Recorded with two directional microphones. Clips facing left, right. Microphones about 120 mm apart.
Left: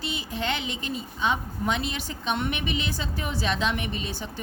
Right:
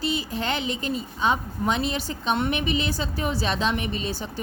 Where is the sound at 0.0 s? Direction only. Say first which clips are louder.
Right 4 dB; 40° right (ahead or behind).